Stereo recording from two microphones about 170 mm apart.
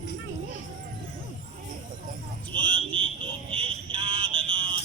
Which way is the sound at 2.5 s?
30° right (ahead or behind).